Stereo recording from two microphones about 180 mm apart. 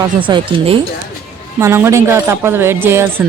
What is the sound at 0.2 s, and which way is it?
Speech, 25° right (ahead or behind).